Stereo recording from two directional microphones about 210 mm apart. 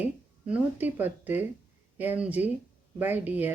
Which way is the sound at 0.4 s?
5° right (ahead or behind).